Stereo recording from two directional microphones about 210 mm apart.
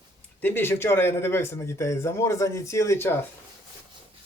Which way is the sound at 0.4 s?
10° left (ahead or behind).